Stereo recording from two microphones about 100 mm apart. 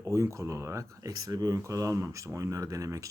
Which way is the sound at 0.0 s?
30° right (ahead or behind).